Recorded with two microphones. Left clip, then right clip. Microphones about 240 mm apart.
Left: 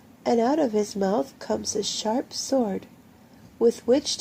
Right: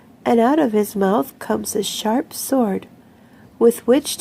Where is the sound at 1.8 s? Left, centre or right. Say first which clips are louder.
Right 5 dB; centre.